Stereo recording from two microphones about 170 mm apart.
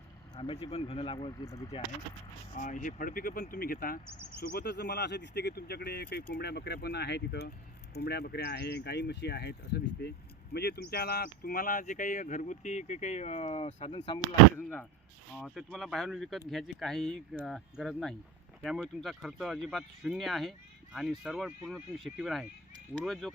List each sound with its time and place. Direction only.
0.3 s speech: 35° left (ahead or behind)
2.6 s speech: 50° left (ahead or behind)
4.4 s speech: 70° left (ahead or behind); by 14.2 s 35° left (ahead or behind)
15.4 s speech: 5° left (ahead or behind)